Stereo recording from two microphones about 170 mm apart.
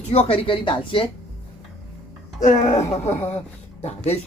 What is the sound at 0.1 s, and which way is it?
Speech, 35° left (ahead or behind).